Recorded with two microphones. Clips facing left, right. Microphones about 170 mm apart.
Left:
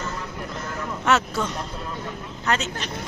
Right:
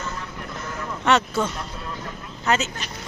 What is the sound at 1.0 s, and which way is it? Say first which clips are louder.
A woman's voice: right 2 dB; centre (ahead or behind).